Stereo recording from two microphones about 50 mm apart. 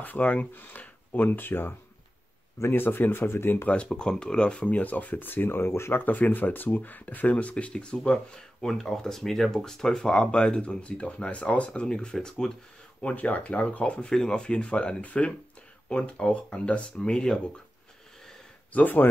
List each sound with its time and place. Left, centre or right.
0.0 s speech: left
3.6 s speech: left
5.9 s speech: left; by 12.5 s centre
13.0 s speech: left
14.0 s speech: centre
18.7 s speech: left